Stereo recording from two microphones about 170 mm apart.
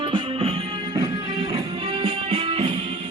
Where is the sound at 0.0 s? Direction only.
30° right (ahead or behind).